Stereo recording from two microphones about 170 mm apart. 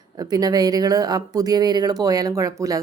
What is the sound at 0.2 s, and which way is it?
Speech, 20° right (ahead or behind).